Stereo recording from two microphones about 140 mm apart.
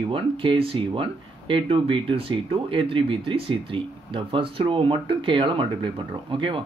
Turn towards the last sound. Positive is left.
turn(degrees=-35)  # may be behind; listen again after turning